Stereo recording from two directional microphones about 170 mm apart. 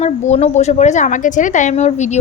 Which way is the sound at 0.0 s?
40° left (ahead or behind).